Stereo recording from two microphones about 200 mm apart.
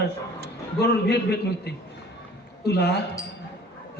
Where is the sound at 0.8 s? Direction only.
55° left (ahead or behind).